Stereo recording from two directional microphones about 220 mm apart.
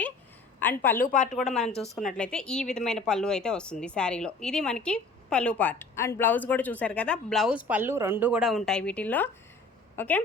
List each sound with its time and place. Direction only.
0.6 s a woman's voice: 10° left (ahead or behind)
1.0 s speech: 35° left (ahead or behind)
1.3 s speech: centre (ahead or behind)